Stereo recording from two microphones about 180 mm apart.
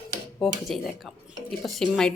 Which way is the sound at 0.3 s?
Centre (ahead or behind).